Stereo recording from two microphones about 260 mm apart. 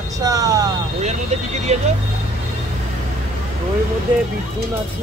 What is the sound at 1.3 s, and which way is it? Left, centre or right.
Speech, right.